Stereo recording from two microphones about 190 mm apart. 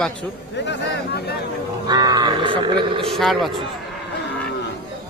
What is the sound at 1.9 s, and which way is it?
Speech, 20° right (ahead or behind).